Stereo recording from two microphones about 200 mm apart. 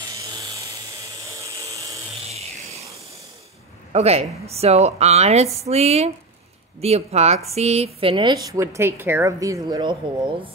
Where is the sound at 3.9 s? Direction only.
30° right (ahead or behind).